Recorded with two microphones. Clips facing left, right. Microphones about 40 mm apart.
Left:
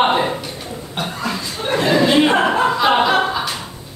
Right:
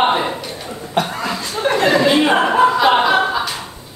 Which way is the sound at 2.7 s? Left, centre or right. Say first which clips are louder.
Right 2 dB; centre.